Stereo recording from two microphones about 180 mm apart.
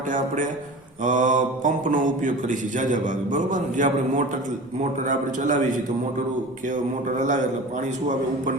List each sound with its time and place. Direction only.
1.0 s mantra: 45° right (ahead or behind)